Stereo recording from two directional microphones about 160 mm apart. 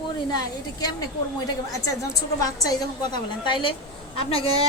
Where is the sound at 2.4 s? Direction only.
25° left (ahead or behind).